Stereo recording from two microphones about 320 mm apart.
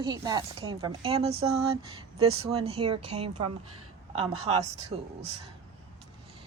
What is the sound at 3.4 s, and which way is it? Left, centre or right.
A woman's voice, right.